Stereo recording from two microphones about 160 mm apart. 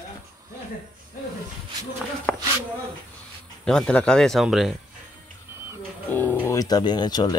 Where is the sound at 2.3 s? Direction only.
10° left (ahead or behind).